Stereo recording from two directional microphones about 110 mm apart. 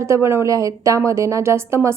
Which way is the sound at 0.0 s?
25° right (ahead or behind).